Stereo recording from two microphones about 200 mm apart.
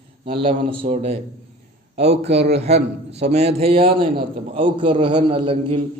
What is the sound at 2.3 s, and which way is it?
Speech, 55° right (ahead or behind).